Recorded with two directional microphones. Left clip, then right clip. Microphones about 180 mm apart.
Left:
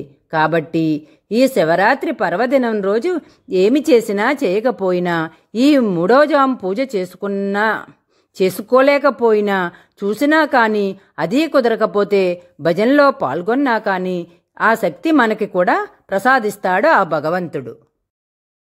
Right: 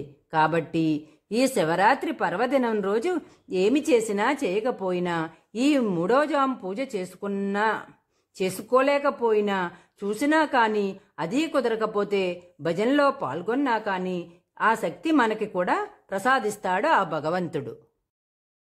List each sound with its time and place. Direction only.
0.3 s speech: 20° left (ahead or behind)